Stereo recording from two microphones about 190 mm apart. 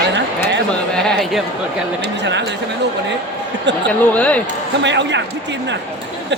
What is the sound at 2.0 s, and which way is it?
Speech, 65° right (ahead or behind).